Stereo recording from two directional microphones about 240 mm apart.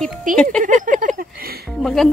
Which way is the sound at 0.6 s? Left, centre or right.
Right.